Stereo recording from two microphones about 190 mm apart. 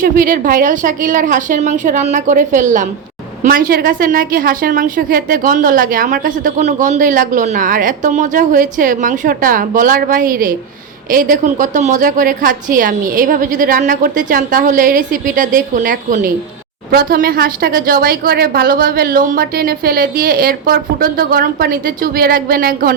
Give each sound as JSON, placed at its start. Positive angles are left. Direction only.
{"t": 0.0, "sound": "a woman's voice", "side_deg": -45}